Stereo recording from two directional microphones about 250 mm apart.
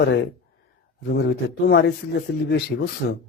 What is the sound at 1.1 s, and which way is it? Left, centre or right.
Speech, left.